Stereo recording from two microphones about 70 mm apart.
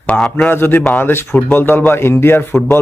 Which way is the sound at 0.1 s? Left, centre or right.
Centre.